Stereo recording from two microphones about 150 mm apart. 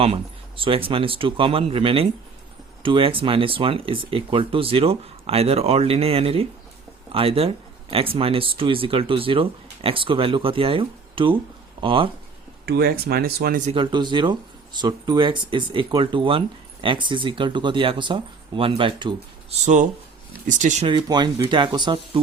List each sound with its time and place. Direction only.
0.0 s speech: 40° right (ahead or behind)
12.6 s speech: 90° right
13.7 s speech: 35° right (ahead or behind)
19.6 s speech: 55° right (ahead or behind)
20.8 s speech: 30° right (ahead or behind)